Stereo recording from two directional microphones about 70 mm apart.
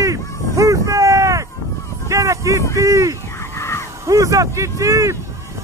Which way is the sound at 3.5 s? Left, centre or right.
Left.